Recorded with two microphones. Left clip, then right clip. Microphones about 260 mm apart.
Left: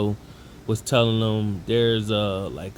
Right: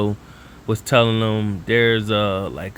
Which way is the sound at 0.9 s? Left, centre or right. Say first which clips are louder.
Right 5 dB; right.